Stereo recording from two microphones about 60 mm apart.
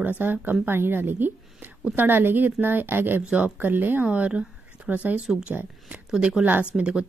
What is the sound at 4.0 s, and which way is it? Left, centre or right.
Speech, right.